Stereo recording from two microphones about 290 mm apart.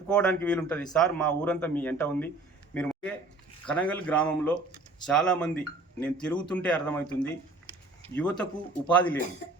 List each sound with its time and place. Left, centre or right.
0.1 s speech: centre
8.1 s speech: centre